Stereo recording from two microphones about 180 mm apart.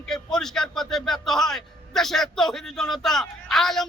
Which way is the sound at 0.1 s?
Centre (ahead or behind).